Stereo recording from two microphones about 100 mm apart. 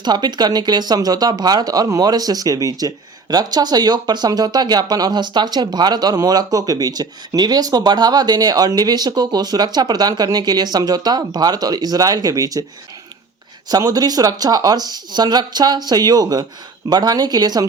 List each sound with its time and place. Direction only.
0.0 s speech: 45° right (ahead or behind)
13.7 s speech: 40° right (ahead or behind)